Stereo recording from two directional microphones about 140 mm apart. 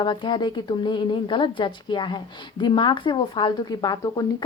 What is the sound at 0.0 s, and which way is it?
A woman's voice, 35° left (ahead or behind).